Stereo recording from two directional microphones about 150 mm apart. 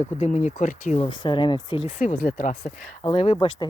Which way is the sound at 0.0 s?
55° left (ahead or behind).